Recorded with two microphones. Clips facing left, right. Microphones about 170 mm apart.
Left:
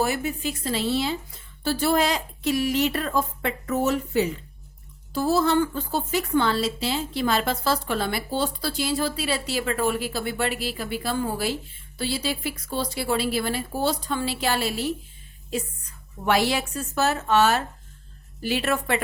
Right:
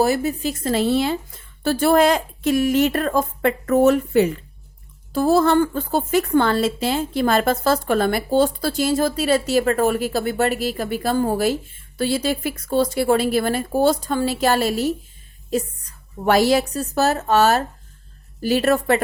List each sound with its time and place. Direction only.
0.0 s a woman's voice: 35° right (ahead or behind)